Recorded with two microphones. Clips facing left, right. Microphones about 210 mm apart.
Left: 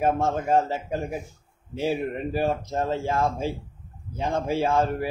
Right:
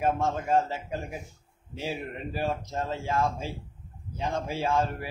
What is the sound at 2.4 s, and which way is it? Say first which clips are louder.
A man's voice: left 4 dB; 45° left (ahead or behind).